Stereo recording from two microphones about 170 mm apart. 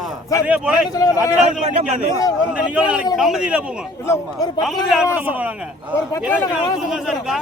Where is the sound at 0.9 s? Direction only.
20° left (ahead or behind).